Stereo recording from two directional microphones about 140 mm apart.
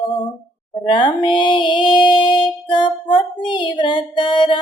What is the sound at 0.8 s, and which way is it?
Music, 35° left (ahead or behind).